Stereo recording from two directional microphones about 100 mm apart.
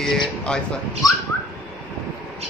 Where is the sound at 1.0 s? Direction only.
40° left (ahead or behind).